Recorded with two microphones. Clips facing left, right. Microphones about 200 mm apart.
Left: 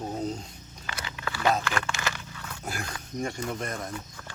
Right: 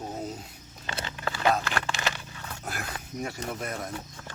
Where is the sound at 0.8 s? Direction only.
30° right (ahead or behind).